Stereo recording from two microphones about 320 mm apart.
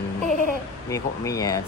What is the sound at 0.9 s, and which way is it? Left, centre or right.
Speech, centre.